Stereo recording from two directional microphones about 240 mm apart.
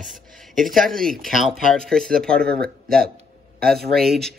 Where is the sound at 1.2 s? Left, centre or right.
Centre.